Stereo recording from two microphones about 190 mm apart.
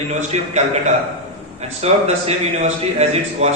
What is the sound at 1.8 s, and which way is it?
A man's voice, 35° right (ahead or behind).